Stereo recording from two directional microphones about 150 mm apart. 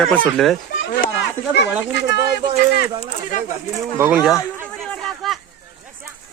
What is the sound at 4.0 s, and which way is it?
Speech, 10° right (ahead or behind).